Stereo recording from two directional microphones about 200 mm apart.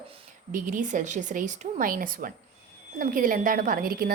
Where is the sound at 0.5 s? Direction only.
40° right (ahead or behind).